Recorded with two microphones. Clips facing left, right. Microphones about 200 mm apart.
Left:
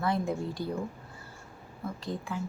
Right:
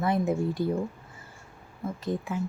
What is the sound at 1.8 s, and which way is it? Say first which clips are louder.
Speech: right 3 dB; 20° right (ahead or behind).